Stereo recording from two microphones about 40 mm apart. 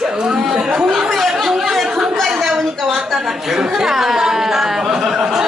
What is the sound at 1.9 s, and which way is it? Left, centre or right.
Speech, right.